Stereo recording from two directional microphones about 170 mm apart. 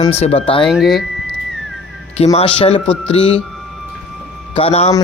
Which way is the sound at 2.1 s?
40° left (ahead or behind).